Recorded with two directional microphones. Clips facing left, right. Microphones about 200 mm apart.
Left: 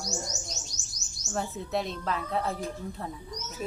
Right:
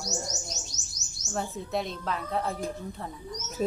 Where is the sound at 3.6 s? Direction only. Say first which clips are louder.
Right 7 dB; 35° right (ahead or behind).